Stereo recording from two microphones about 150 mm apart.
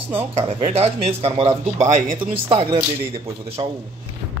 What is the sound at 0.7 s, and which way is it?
Speech, 40° right (ahead or behind).